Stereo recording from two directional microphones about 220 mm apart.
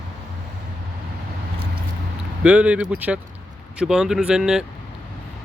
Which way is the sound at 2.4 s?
5° right (ahead or behind).